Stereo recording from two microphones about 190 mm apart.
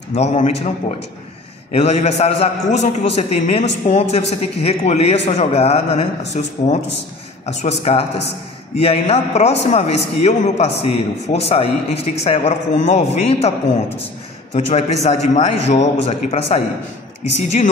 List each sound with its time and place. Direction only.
0.1 s a woman's voice: 40° left (ahead or behind)
14.5 s a woman's voice: 35° left (ahead or behind)